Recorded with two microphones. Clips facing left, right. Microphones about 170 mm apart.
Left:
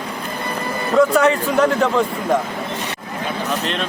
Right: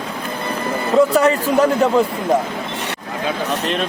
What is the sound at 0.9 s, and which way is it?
Speech, 30° right (ahead or behind).